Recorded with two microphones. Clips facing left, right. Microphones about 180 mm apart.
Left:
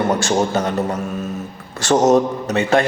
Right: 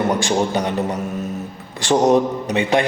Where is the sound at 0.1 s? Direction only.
15° right (ahead or behind).